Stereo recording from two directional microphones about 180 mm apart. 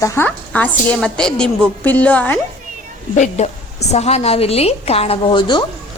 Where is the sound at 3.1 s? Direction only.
40° left (ahead or behind); by 5.6 s 25° left (ahead or behind).